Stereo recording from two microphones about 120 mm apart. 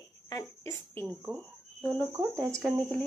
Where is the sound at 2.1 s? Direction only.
25° right (ahead or behind).